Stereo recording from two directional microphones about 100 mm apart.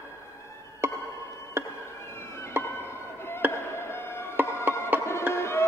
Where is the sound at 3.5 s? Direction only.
25° left (ahead or behind).